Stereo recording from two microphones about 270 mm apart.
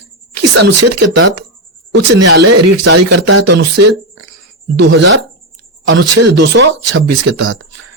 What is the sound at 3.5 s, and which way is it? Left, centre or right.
Speech, right.